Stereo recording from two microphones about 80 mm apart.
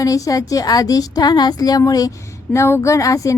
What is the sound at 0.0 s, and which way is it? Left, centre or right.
Speech, left.